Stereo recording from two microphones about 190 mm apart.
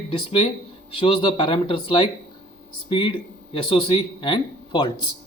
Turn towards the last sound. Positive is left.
turn(degrees=25)  # may be behind; listen again after turning